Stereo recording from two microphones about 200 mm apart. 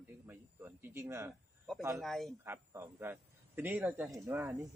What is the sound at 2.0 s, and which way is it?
Speech, centre (ahead or behind).